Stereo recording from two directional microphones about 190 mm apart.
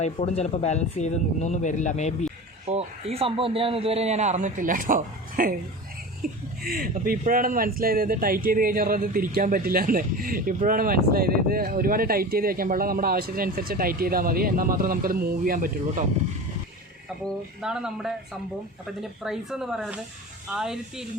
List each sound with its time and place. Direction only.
0.0 s speech: 35° left (ahead or behind)
2.6 s a man's voice: 30° right (ahead or behind)
17.2 s speech: 5° right (ahead or behind)
19.2 s speech: centre (ahead or behind)